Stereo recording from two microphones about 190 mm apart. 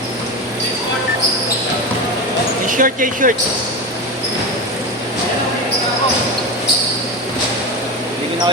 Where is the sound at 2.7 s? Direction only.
45° right (ahead or behind).